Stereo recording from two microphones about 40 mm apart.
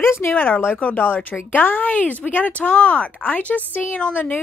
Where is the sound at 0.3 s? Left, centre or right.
Left.